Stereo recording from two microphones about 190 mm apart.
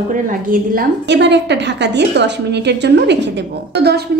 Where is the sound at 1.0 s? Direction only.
65° right (ahead or behind).